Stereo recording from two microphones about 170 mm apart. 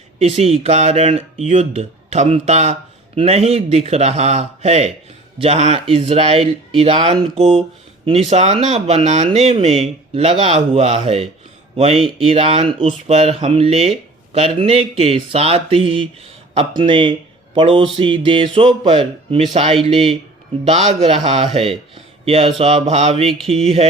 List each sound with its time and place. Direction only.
0.2 s speech: 35° right (ahead or behind)